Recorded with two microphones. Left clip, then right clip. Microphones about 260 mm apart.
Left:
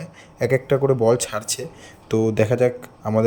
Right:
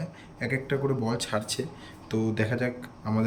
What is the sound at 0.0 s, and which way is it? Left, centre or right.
Speech, centre.